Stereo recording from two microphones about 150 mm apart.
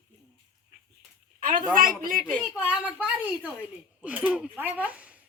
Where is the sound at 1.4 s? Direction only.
65° right (ahead or behind).